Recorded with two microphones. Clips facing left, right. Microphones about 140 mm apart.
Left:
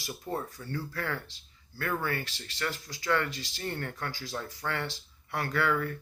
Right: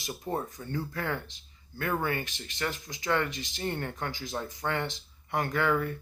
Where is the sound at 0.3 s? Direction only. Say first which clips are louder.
Right 2 dB; 20° right (ahead or behind).